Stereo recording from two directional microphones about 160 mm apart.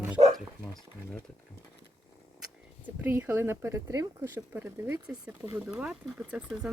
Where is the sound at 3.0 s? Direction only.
15° right (ahead or behind).